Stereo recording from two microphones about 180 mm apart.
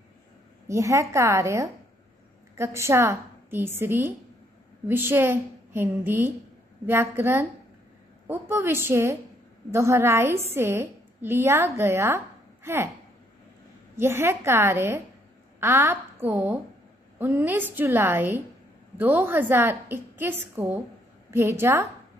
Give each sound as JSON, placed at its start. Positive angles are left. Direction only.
{"t": 0.7, "sound": "a woman's voice", "side_deg": -15}
{"t": 13.9, "sound": "a woman's voice", "side_deg": -15}